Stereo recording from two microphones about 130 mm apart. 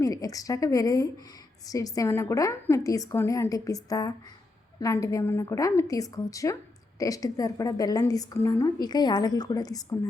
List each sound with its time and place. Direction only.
0.0 s a woman's voice: 25° left (ahead or behind)